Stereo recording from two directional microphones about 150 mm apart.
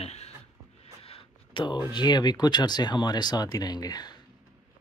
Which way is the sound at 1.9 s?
30° left (ahead or behind).